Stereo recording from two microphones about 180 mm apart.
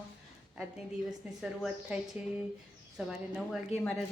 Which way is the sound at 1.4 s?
5° right (ahead or behind).